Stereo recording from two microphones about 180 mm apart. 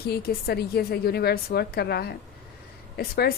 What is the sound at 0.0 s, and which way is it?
Speech, 60° left (ahead or behind).